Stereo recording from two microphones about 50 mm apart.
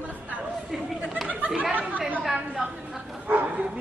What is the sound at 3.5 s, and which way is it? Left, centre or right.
Bow-wow, centre.